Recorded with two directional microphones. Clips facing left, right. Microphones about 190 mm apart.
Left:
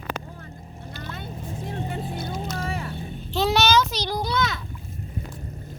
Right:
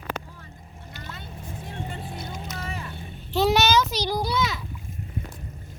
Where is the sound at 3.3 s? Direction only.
15° right (ahead or behind).